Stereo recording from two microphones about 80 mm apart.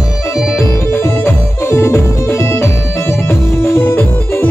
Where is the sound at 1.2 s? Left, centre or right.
Left.